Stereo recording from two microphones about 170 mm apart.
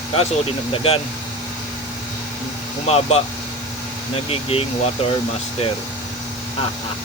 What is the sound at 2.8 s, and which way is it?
Speech, 35° left (ahead or behind).